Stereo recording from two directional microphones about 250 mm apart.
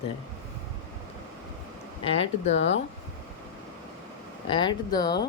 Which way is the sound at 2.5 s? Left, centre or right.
Left.